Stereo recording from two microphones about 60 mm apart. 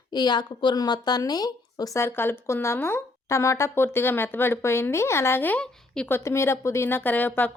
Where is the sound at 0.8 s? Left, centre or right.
Left.